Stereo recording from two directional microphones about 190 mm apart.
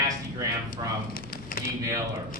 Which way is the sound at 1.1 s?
50° left (ahead or behind).